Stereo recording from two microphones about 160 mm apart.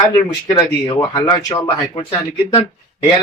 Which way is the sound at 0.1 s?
25° left (ahead or behind).